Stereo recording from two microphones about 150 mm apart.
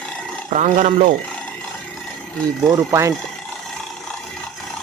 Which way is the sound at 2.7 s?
20° right (ahead or behind).